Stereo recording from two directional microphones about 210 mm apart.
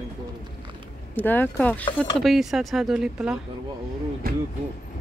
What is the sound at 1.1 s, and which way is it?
Speech, 10° left (ahead or behind).